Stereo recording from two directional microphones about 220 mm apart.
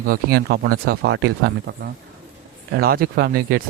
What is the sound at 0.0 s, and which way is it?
Speech, 40° right (ahead or behind).